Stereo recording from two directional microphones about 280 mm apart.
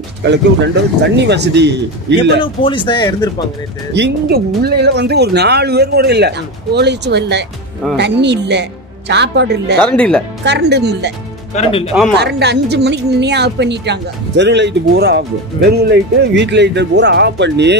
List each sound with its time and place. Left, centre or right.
0.2 s speech: right
2.4 s speech: centre
3.9 s speech: right
9.8 s speech: centre
10.4 s speech: right
11.5 s speech: left
12.2 s speech: right